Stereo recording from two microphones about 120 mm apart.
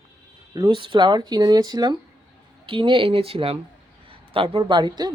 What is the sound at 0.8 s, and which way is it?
Speech, 40° right (ahead or behind).